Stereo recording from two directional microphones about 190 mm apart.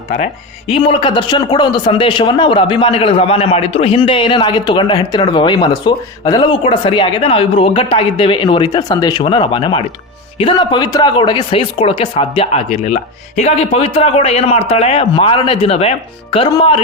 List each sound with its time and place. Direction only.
0.7 s a man's voice: 25° left (ahead or behind)